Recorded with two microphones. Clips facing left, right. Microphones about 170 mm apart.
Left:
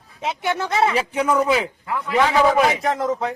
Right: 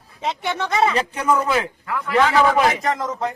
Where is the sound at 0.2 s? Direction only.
5° left (ahead or behind).